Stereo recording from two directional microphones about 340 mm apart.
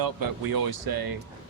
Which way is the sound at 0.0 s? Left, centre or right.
Right.